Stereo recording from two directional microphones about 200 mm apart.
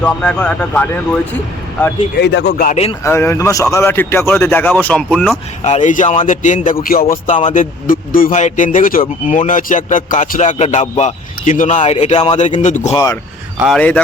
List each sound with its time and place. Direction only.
0.0 s a man's voice: 5° left (ahead or behind)
2.2 s speech: 55° left (ahead or behind)
3.0 s a man's voice: 15° left (ahead or behind)
5.6 s speech: 35° left (ahead or behind)
12.9 s a man's voice: 15° left (ahead or behind)
13.6 s speech: 5° left (ahead or behind)